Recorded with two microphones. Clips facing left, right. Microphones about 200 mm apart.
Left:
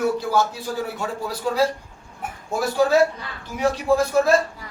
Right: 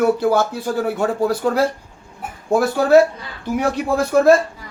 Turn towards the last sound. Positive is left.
turn(degrees=-55)  # may be behind; listen again after turning